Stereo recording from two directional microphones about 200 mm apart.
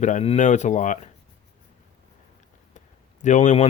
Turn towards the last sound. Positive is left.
turn(degrees=35)  # may be behind; listen again after turning